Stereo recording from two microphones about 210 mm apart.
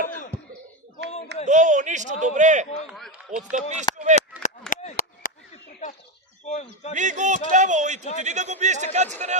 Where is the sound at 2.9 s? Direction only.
5° right (ahead or behind).